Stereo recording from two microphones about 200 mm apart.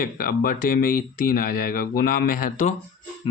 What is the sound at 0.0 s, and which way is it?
Speech, 45° left (ahead or behind).